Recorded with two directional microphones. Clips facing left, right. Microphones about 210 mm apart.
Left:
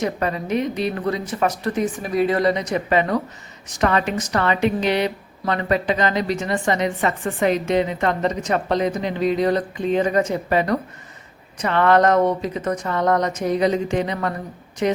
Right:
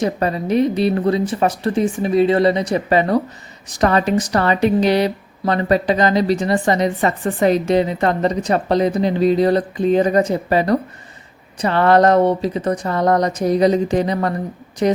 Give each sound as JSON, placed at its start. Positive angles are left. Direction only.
{"t": 0.0, "sound": "a woman's voice", "side_deg": -35}